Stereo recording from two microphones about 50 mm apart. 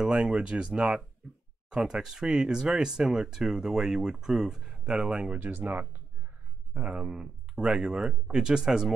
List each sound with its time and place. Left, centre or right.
0.0 s speech: centre
5.4 s speech: right
6.7 s speech: right